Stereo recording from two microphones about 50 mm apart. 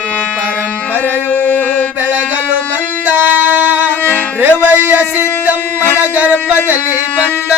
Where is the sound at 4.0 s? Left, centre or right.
Left.